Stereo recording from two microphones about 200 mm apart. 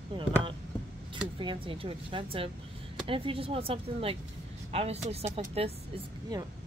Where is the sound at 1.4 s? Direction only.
25° right (ahead or behind).